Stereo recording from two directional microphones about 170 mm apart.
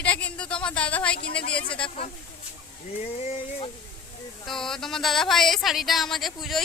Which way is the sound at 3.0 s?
40° left (ahead or behind).